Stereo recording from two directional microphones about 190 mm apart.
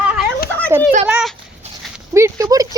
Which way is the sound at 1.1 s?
5° right (ahead or behind).